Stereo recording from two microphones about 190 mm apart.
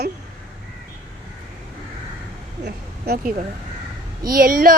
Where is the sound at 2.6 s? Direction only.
55° right (ahead or behind).